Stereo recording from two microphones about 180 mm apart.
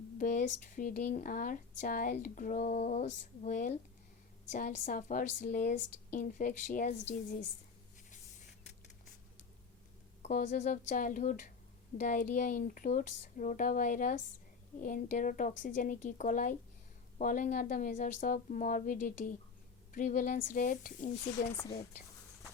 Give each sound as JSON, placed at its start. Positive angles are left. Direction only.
{"t": 0.2, "sound": "a sound", "side_deg": 45}
{"t": 0.7, "sound": "speech", "side_deg": 45}
{"t": 10.2, "sound": "speech", "side_deg": 45}